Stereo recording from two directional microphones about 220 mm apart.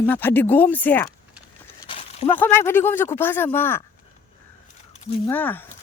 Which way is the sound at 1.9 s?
25° left (ahead or behind).